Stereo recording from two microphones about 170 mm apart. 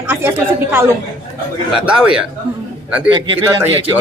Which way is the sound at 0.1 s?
10° right (ahead or behind).